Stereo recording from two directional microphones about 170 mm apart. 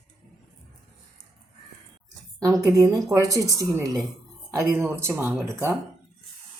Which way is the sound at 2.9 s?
20° right (ahead or behind).